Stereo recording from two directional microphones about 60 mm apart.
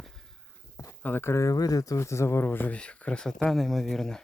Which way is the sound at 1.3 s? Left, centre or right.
Left.